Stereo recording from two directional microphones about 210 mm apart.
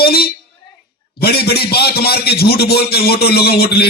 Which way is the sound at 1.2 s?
50° left (ahead or behind).